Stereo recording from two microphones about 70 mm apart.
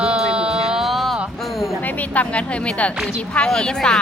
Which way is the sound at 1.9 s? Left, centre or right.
Left.